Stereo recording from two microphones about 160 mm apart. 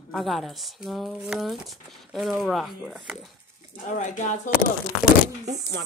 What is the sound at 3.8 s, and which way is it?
Speech, 50° left (ahead or behind).